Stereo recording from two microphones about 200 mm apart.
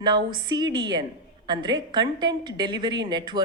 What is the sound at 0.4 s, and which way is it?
A woman's voice, 20° right (ahead or behind).